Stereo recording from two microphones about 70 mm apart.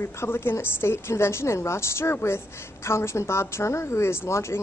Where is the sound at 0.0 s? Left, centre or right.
Left.